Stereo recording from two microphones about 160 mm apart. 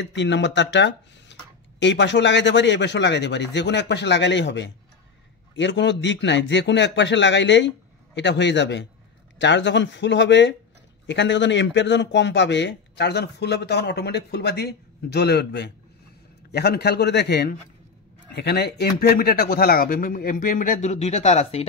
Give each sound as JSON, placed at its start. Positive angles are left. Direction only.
{"t": 0.0, "sound": "a man's voice", "side_deg": 90}